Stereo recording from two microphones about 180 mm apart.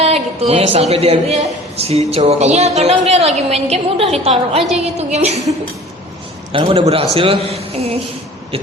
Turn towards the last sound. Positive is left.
turn(degrees=-35)  # may be behind; listen again after turning